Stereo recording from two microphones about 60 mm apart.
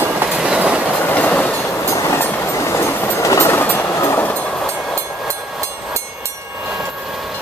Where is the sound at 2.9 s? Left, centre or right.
Left.